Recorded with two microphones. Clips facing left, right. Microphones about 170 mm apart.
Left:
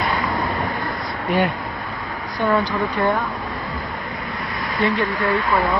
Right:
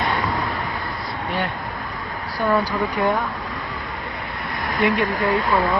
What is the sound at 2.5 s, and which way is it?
Speech, 10° right (ahead or behind).